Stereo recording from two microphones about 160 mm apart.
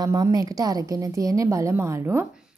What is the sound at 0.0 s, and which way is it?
Speech, 25° right (ahead or behind).